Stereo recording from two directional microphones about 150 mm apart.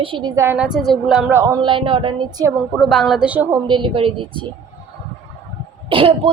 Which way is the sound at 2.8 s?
Centre (ahead or behind).